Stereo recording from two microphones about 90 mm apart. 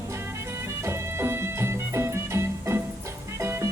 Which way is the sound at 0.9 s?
30° right (ahead or behind).